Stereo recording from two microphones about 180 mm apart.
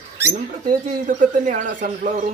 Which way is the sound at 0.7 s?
45° right (ahead or behind).